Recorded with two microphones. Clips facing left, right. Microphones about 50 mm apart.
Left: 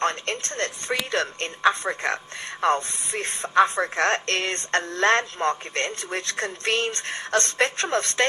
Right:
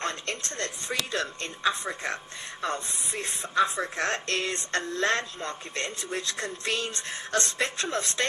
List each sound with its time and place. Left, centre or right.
0.0 s a woman's voice: left